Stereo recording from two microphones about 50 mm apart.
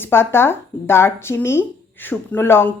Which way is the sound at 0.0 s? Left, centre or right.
Left.